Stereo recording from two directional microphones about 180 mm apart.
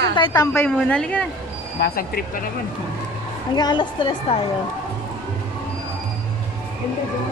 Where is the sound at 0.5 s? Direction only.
5° left (ahead or behind).